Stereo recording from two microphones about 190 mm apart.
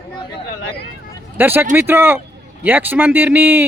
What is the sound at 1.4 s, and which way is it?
Speech, 10° right (ahead or behind).